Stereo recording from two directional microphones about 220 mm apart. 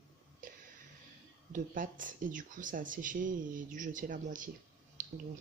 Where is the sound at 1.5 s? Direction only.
35° right (ahead or behind).